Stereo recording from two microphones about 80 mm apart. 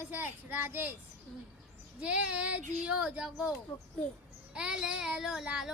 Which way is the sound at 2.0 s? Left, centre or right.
Centre.